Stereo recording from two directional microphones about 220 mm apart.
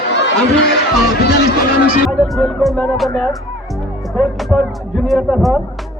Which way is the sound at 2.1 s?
Centre (ahead or behind).